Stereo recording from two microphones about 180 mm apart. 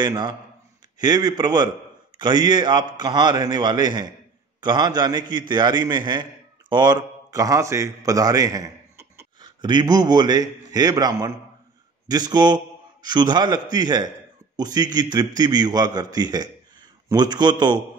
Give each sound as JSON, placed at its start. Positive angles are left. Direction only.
{"t": 0.0, "sound": "a man's voice", "side_deg": -25}
{"t": 9.4, "sound": "a man's voice", "side_deg": -25}